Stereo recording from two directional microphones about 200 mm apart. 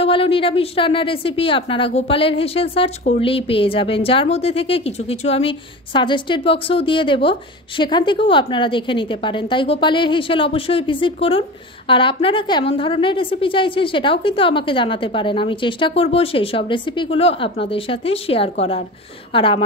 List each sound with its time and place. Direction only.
0.0 s a woman's voice: 30° left (ahead or behind)